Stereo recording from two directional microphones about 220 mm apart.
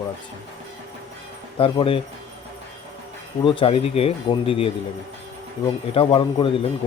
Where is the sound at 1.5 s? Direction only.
25° left (ahead or behind).